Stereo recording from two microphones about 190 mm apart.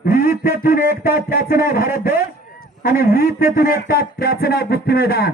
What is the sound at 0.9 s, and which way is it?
Speech, 50° left (ahead or behind).